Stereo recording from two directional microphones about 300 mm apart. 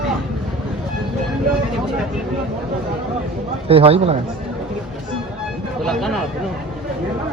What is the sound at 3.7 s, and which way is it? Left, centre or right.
Speech, centre.